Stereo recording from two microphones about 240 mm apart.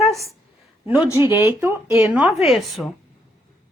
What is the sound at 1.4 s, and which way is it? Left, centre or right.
Speech, centre.